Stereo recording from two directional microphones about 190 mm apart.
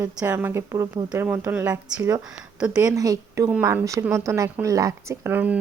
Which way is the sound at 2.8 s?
15° right (ahead or behind).